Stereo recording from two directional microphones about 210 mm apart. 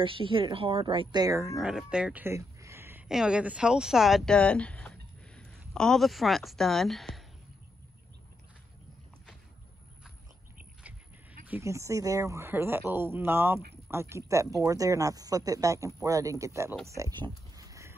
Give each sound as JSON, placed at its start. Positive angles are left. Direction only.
{"t": 0.0, "sound": "a woman's voice", "side_deg": -25}
{"t": 1.5, "sound": "speech", "side_deg": -5}
{"t": 11.4, "sound": "speech", "side_deg": -10}
{"t": 17.6, "sound": "rowboat", "side_deg": -15}